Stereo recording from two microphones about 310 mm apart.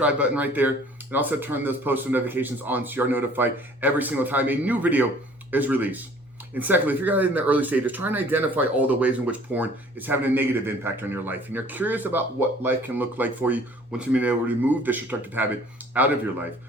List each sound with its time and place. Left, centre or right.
0.0 s speech: centre